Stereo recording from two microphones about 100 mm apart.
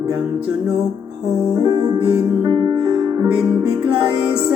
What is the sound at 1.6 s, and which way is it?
Music, 45° right (ahead or behind).